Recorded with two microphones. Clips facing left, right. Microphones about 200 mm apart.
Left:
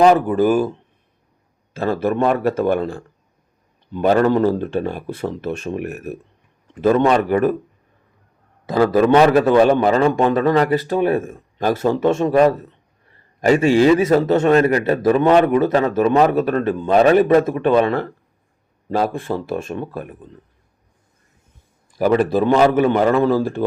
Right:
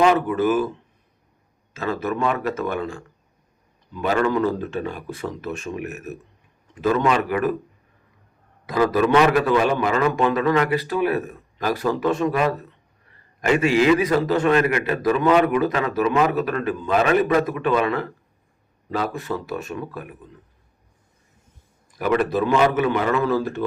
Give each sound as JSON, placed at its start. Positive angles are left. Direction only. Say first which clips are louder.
{"t": 0.3, "sound": "a man's voice", "louder": "left 4 dB", "side_deg": 30}
{"t": 1.7, "sound": "a man's voice", "louder": "left 6 dB", "side_deg": 30}
{"t": 8.6, "sound": "a man's voice", "louder": "left 4 dB", "side_deg": 30}
{"t": 21.9, "sound": "a man's voice", "louder": "left 5 dB", "side_deg": 35}